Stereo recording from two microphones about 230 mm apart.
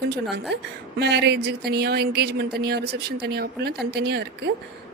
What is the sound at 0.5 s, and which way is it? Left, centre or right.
A woman's voice, right.